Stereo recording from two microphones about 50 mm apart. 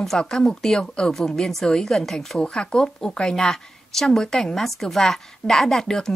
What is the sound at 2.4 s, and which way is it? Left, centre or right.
Speech, centre.